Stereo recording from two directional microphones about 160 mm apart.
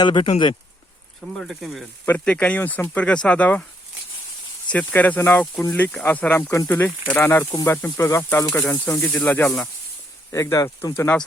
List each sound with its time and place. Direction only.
0.0 s speech: 30° left (ahead or behind)
1.4 s speech: centre (ahead or behind)
2.0 s speech: 10° left (ahead or behind)
4.7 s speech: 10° left (ahead or behind)